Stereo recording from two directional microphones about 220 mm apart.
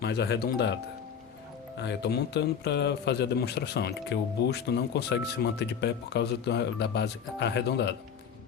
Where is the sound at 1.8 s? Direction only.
50° left (ahead or behind).